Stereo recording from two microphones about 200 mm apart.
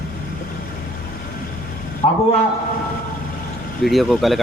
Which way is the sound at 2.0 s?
30° left (ahead or behind).